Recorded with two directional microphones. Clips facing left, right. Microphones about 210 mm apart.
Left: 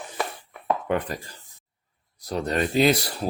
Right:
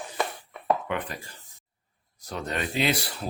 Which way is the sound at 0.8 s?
40° left (ahead or behind).